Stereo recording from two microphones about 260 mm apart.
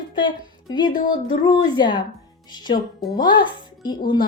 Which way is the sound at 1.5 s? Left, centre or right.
Centre.